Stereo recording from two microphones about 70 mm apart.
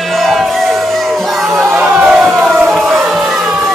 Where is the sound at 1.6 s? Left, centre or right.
Right; by 2.5 s centre.